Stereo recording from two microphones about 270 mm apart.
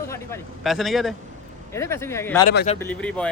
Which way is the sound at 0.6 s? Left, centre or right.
Centre.